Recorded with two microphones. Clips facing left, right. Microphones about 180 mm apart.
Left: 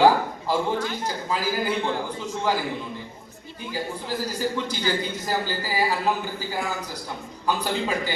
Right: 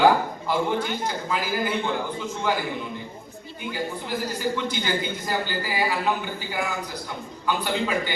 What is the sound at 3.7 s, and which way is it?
A man's voice, 35° left (ahead or behind).